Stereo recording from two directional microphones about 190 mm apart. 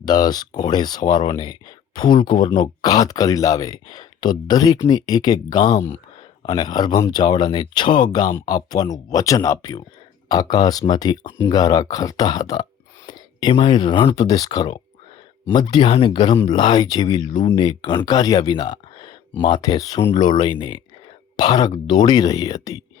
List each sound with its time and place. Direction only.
0.0 s speech: 20° left (ahead or behind)